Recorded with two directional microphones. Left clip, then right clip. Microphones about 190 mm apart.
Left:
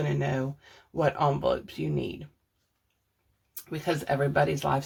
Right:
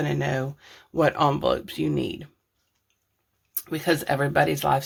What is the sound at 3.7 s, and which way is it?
Speech, 40° right (ahead or behind).